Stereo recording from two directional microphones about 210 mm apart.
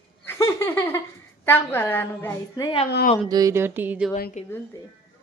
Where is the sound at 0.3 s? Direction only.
15° left (ahead or behind).